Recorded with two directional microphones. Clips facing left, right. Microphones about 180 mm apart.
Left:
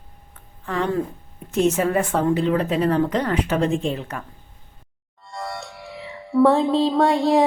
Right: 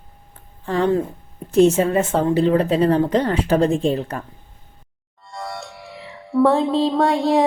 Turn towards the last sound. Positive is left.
turn(degrees=0)  # may be behind; listen again after turning